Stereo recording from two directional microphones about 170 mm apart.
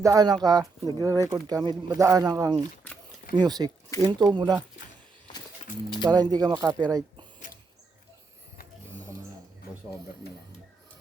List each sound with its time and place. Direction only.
0.0 s speech: 20° right (ahead or behind)
6.0 s speech: 25° right (ahead or behind)
7.3 s a sound: 50° left (ahead or behind)